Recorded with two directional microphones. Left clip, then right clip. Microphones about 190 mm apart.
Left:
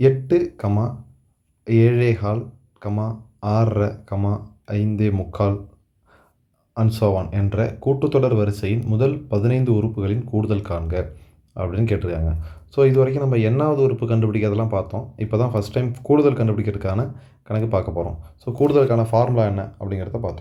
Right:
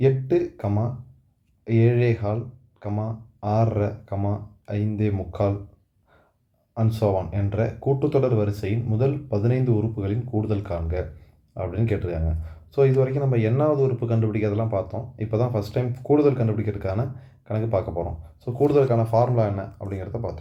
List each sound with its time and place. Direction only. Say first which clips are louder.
0.0 s speech: left 4 dB; 35° left (ahead or behind)
6.7 s speech: left 3 dB; 35° left (ahead or behind)